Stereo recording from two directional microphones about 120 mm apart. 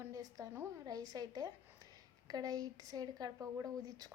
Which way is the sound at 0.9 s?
30° right (ahead or behind).